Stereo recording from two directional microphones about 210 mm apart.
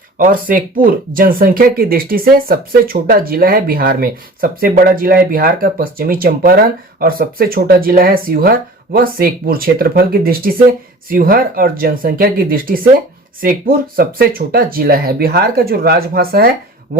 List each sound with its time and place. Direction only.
0.2 s speech: 40° right (ahead or behind)